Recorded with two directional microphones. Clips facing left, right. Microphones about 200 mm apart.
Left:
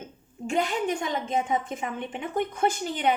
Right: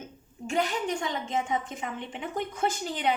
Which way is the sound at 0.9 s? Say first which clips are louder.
Left 3 dB; 50° left (ahead or behind).